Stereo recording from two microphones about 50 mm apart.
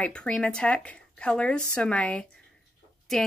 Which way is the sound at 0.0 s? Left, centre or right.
Left.